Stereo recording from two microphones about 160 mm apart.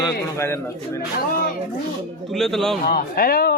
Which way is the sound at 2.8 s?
65° left (ahead or behind).